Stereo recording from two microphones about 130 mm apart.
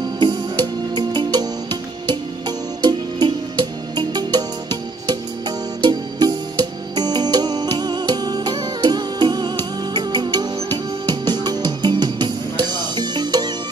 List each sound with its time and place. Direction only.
0.2 s music: 35° right (ahead or behind)